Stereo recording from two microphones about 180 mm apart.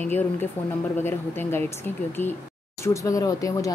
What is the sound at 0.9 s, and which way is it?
Speech, 10° left (ahead or behind).